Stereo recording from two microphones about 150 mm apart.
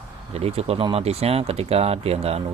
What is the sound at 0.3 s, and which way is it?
Speech, 40° right (ahead or behind).